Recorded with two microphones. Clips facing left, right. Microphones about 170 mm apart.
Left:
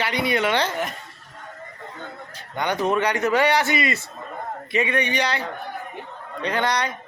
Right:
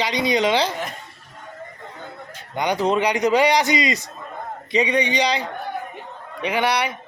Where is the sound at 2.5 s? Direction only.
15° right (ahead or behind).